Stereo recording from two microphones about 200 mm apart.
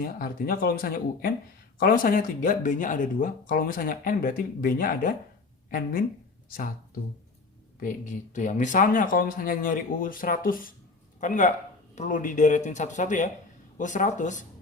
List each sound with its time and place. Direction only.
0.0 s speech: 45° left (ahead or behind)
7.8 s speech: 40° left (ahead or behind)